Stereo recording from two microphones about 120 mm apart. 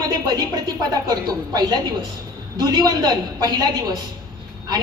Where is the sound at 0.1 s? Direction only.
35° right (ahead or behind).